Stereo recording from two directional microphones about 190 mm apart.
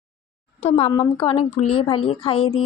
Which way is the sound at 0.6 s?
30° left (ahead or behind).